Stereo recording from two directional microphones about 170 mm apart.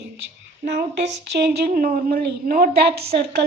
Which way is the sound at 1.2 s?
75° right (ahead or behind).